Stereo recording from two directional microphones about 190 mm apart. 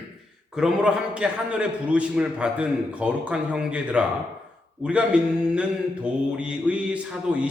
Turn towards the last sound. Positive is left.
turn(degrees=-5)  # may be behind; listen again after turning